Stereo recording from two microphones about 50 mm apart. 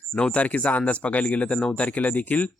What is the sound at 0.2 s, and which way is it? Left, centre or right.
A man's voice, left.